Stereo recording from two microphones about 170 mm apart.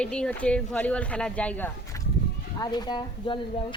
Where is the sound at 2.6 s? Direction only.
25° left (ahead or behind).